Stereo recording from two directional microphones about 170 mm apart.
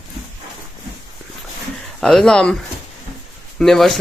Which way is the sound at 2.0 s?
5° left (ahead or behind).